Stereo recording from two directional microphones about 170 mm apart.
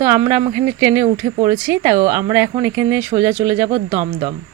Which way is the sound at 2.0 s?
55° right (ahead or behind).